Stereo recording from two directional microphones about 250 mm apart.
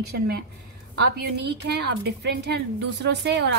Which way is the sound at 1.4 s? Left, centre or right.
Right.